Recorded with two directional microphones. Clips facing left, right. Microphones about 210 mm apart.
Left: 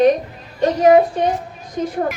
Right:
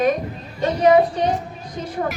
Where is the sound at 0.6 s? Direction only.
45° left (ahead or behind).